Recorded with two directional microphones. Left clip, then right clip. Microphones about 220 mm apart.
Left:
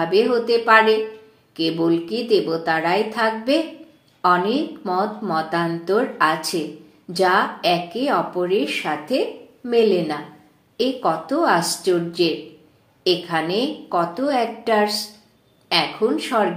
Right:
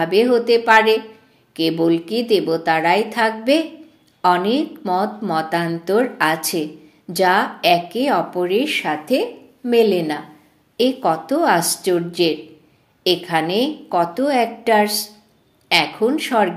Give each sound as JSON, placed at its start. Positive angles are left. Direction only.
{"t": 0.0, "sound": "speech", "side_deg": -35}